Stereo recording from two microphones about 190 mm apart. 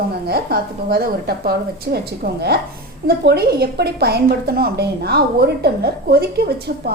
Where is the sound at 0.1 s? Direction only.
55° right (ahead or behind).